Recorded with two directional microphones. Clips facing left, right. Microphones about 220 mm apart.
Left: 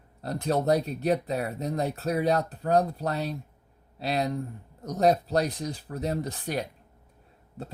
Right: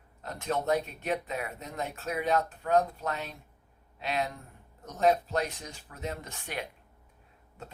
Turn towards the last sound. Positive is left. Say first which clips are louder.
# left 7 dB
turn(degrees=35)  # may be behind; listen again after turning